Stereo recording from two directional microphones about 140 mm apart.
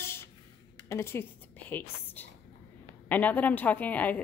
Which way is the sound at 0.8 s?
20° left (ahead or behind).